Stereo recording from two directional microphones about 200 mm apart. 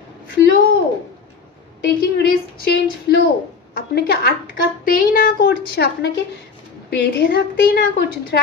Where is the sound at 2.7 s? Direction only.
55° left (ahead or behind).